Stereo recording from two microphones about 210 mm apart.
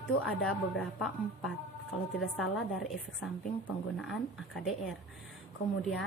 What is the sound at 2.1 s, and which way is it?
Speech, 5° left (ahead or behind).